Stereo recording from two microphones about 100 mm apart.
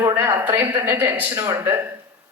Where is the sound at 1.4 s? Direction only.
30° right (ahead or behind).